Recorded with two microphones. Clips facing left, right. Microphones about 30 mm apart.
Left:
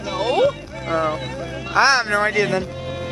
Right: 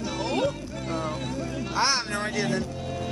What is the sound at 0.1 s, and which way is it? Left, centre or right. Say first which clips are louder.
Music: left 10 dB; left.